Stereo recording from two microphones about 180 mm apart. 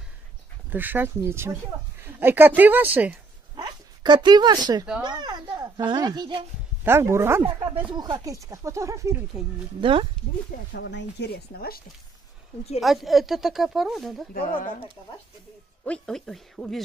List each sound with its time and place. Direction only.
0.7 s speech: 10° right (ahead or behind)
3.5 s a sound: 25° right (ahead or behind)
5.0 s speech: 25° right (ahead or behind)
6.8 s speech: 15° right (ahead or behind)
9.8 s speech: 30° right (ahead or behind)
10.7 s speech: 80° left; by 11.8 s 55° left (ahead or behind)
12.8 s speech: centre (ahead or behind)
15.8 s speech: 5° left (ahead or behind)